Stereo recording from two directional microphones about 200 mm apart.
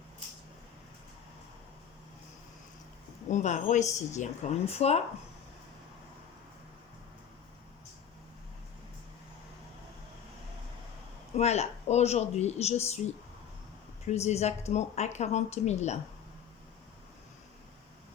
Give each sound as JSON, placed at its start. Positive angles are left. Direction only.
{"t": 3.2, "sound": "speech", "side_deg": 35}
{"t": 11.3, "sound": "speech", "side_deg": 35}
{"t": 14.0, "sound": "speech", "side_deg": 35}